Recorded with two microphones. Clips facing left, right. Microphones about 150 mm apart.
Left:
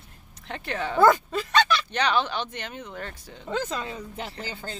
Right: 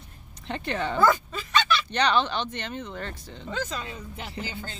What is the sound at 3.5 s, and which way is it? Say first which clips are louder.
Speech: left 3 dB; 55° left (ahead or behind).